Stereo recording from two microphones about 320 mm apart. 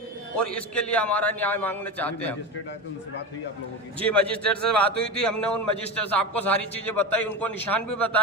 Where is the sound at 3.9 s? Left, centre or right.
Centre.